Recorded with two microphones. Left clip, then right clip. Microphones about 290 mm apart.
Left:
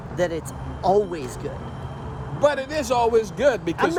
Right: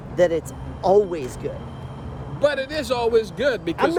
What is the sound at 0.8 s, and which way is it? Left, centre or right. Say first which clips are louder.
Speech: right 3 dB; centre.